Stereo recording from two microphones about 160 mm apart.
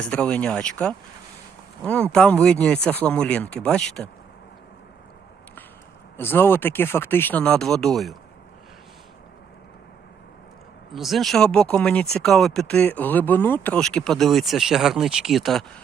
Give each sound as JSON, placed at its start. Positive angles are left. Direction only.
{"t": 0.0, "sound": "speech", "side_deg": 5}
{"t": 6.1, "sound": "speech", "side_deg": 15}
{"t": 10.9, "sound": "speech", "side_deg": 0}